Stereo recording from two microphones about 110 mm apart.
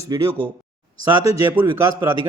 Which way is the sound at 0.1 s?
30° right (ahead or behind).